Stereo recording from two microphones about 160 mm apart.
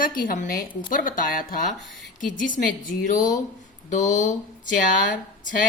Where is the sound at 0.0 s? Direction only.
60° left (ahead or behind).